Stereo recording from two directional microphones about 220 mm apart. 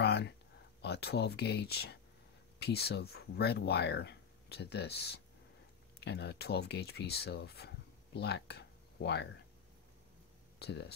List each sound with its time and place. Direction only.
0.0 s a sound: 50° left (ahead or behind)
0.8 s speech: 50° left (ahead or behind)
10.6 s speech: 50° left (ahead or behind)